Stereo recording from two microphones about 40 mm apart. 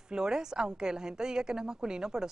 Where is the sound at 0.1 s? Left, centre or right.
Centre.